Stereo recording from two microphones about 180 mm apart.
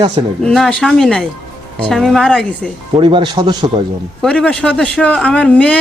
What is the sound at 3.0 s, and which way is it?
Speech, 25° right (ahead or behind).